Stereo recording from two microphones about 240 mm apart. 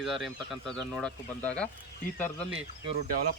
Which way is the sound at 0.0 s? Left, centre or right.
Centre.